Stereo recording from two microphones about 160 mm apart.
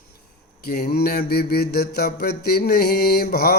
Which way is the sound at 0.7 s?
75° left (ahead or behind).